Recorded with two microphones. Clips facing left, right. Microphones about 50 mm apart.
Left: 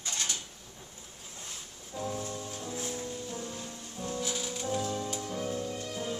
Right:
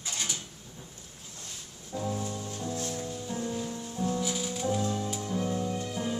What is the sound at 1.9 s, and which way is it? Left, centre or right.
Music, centre.